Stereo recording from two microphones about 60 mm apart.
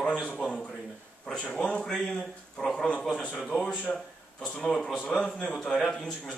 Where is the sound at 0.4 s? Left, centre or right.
Centre.